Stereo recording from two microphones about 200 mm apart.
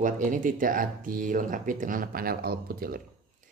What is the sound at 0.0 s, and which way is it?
Speech, 40° right (ahead or behind).